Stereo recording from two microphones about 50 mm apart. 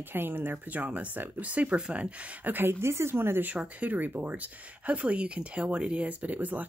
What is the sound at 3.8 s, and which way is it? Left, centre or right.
Speech, right.